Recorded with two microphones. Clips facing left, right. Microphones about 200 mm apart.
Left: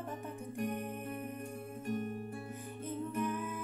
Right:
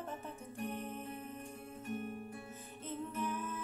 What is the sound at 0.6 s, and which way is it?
Music, 15° left (ahead or behind).